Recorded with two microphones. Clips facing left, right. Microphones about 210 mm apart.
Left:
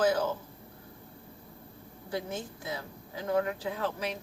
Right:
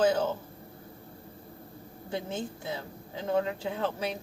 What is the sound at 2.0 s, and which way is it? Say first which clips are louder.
Speech: right 1 dB; 25° right (ahead or behind).